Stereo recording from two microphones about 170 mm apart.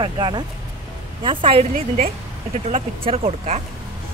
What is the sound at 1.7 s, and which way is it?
Speech, 50° right (ahead or behind).